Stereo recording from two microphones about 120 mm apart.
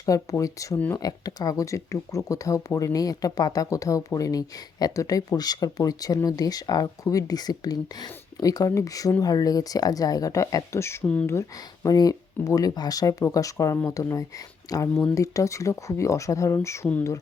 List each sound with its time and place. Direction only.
0.0 s speech: 30° left (ahead or behind)